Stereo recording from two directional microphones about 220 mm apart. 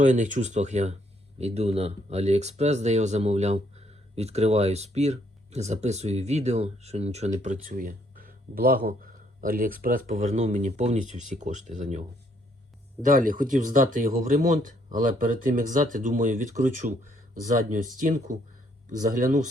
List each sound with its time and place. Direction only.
0.0 s speech: 35° right (ahead or behind)
13.1 s speech: 35° right (ahead or behind)